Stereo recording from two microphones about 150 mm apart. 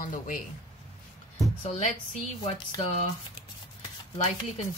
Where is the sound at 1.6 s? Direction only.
45° left (ahead or behind).